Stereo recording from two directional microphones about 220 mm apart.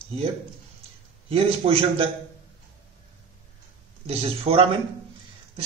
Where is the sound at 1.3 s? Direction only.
25° right (ahead or behind).